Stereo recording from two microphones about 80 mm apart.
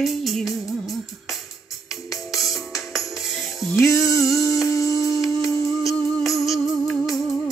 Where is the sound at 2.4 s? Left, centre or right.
Centre.